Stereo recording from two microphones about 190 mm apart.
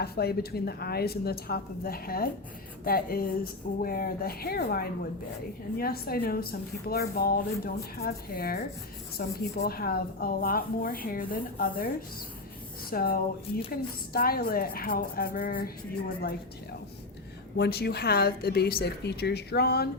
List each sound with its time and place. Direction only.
0.0 s a woman's voice: 55° left (ahead or behind)
12.9 s a woman's voice: 50° left (ahead or behind)
17.6 s a woman's voice: 55° left (ahead or behind)